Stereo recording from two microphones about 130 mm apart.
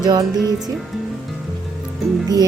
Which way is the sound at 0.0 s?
30° right (ahead or behind).